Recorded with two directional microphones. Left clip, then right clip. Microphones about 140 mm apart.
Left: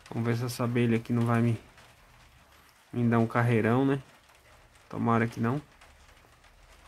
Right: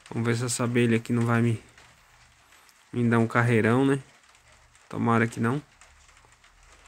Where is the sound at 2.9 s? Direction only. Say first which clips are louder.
Right 3 dB; 20° right (ahead or behind).